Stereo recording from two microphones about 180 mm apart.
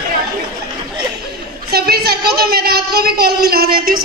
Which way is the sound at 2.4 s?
60° right (ahead or behind).